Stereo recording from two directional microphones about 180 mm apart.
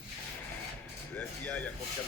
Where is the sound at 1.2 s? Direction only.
10° left (ahead or behind).